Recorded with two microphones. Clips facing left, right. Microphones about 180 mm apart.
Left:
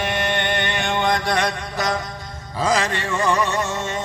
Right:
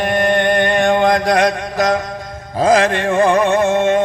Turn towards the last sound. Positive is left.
turn(degrees=-55)  # may be behind; listen again after turning